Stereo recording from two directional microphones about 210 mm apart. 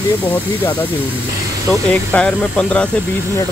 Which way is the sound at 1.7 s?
5° left (ahead or behind).